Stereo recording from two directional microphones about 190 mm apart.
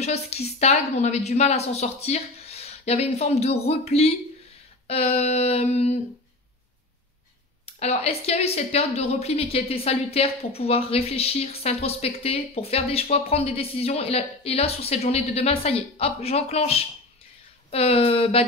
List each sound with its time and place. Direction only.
0.0 s a woman's voice: 35° left (ahead or behind)
7.6 s a woman's voice: 35° left (ahead or behind)